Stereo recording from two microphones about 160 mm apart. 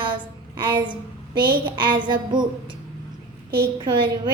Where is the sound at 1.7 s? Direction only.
30° right (ahead or behind).